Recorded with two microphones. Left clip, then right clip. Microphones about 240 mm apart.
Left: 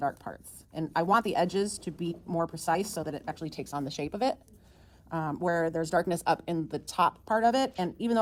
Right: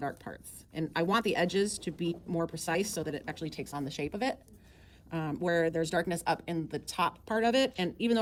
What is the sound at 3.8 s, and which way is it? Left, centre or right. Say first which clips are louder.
A woman's voice: left 4 dB; left.